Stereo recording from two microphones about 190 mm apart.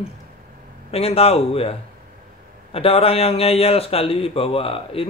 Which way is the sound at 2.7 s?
30° left (ahead or behind).